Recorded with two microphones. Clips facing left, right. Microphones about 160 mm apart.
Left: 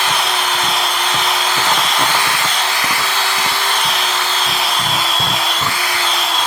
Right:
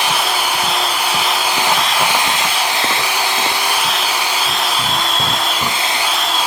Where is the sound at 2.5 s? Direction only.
20° right (ahead or behind); by 4.1 s 5° right (ahead or behind).